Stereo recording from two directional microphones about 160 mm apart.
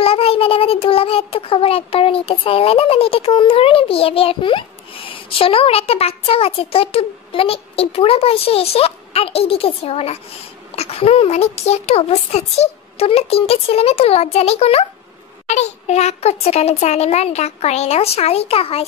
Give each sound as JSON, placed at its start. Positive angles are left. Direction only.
{"t": 0.0, "sound": "child singing", "side_deg": 35}
{"t": 15.4, "sound": "a child's voice", "side_deg": 45}